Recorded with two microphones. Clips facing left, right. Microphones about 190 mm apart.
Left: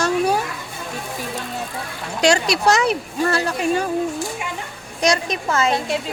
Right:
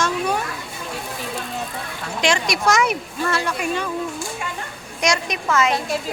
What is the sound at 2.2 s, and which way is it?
Speech, 35° left (ahead or behind).